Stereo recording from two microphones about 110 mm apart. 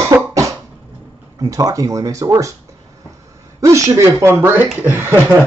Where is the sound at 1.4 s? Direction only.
30° right (ahead or behind).